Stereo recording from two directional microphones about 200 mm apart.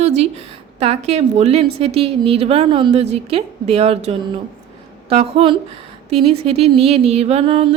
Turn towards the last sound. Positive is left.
turn(degrees=-30)  # may be behind; listen again after turning